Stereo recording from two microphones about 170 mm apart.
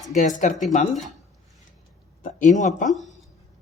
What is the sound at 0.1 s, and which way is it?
Speech, 45° left (ahead or behind).